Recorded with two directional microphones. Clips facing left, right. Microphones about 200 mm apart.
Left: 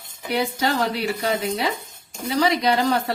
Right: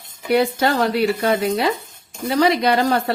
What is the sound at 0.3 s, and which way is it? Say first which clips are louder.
A woman's voice: right 5 dB; 55° right (ahead or behind).